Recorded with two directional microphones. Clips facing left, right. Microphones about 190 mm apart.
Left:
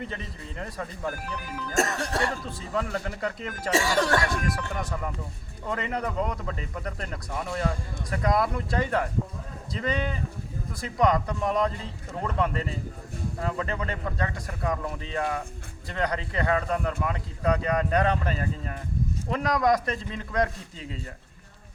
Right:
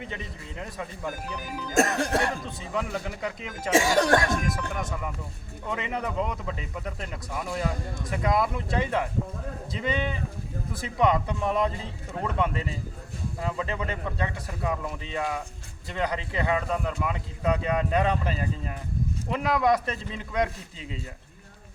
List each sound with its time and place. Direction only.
0.6 s speech: 10° right (ahead or behind)
1.7 s speech: 50° right (ahead or behind)
2.4 s speech: centre (ahead or behind)
3.7 s speech: 50° right (ahead or behind)
4.4 s speech: centre (ahead or behind)